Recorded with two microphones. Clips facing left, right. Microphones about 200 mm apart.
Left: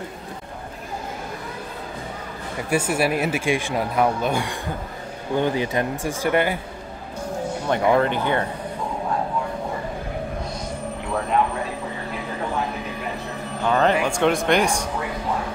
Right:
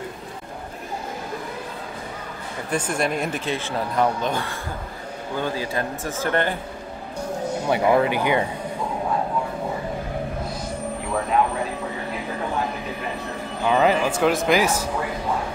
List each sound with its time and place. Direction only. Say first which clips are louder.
2.7 s speech: left 3 dB; 5° left (ahead or behind)
7.6 s speech: even; 5° right (ahead or behind)
11.1 s a man's voice: even; centre (ahead or behind)
13.7 s speech: even; 5° right (ahead or behind)